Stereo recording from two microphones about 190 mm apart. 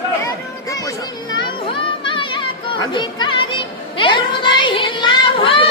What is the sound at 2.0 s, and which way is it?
Chatter, 25° left (ahead or behind).